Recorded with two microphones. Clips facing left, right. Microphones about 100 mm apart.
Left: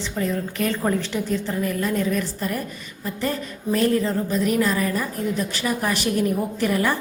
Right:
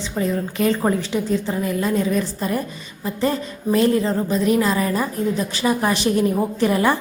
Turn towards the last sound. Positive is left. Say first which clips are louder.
# right 4 dB
turn(degrees=-30)  # may be behind; listen again after turning